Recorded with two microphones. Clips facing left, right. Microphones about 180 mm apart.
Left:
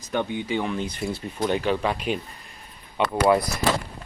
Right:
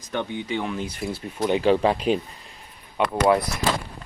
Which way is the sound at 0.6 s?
5° right (ahead or behind).